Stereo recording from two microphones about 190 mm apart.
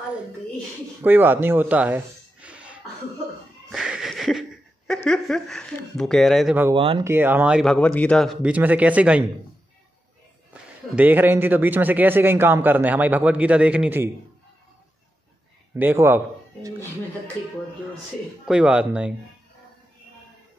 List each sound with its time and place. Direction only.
1.0 s speech: 10° right (ahead or behind)
6.7 s speech: 25° right (ahead or behind)
7.1 s a man's voice: 10° right (ahead or behind)
10.5 s a man's voice: 10° right (ahead or behind)
15.7 s a man's voice: 10° right (ahead or behind)
18.5 s speech: 5° right (ahead or behind)